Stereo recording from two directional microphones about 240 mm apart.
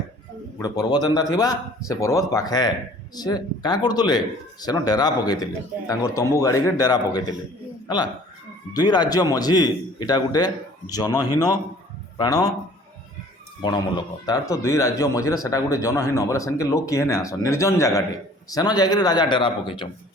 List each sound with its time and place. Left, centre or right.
0.6 s speech: centre
13.6 s speech: centre